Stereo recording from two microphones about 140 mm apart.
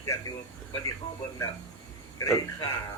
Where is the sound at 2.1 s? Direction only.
20° left (ahead or behind).